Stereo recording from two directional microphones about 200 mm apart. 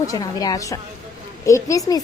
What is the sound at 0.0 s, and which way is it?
A woman's voice, 15° left (ahead or behind).